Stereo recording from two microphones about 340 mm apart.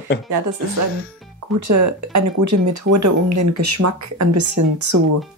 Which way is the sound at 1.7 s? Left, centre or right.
Right.